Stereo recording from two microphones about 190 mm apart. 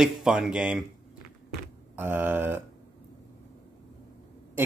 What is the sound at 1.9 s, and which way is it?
Speech, 10° right (ahead or behind).